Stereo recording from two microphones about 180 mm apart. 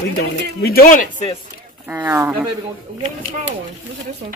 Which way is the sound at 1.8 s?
10° right (ahead or behind).